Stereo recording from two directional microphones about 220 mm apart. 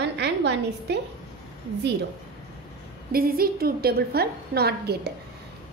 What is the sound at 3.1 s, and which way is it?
A woman's voice, 40° right (ahead or behind).